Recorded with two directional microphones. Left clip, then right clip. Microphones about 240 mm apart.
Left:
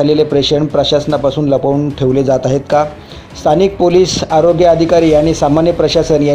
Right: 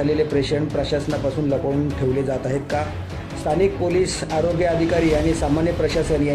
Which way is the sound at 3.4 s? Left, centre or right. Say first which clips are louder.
Left 10 dB; left.